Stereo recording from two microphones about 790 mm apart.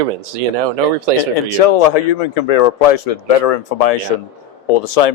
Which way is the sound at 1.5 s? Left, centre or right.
Left.